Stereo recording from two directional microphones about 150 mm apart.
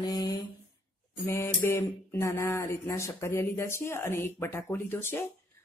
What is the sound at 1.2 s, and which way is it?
Speech, 20° left (ahead or behind).